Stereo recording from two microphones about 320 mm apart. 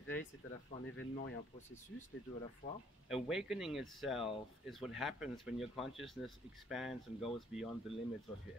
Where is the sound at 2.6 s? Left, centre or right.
Left.